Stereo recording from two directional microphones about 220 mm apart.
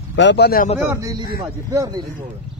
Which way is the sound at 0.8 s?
15° right (ahead or behind).